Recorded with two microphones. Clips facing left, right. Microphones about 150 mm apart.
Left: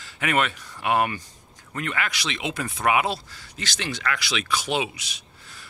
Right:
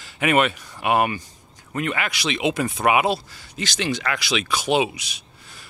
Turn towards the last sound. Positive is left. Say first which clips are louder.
# right 6 dB
turn(degrees=-15)  # may be behind; listen again after turning